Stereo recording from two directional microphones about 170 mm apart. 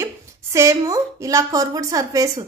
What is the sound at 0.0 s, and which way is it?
A woman's voice, 15° right (ahead or behind).